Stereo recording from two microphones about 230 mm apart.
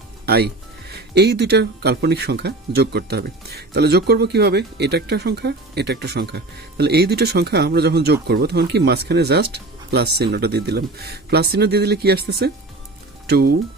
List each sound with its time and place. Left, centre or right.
0.3 s speech: right